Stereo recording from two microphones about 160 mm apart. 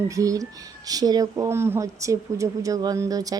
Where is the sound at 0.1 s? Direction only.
20° right (ahead or behind).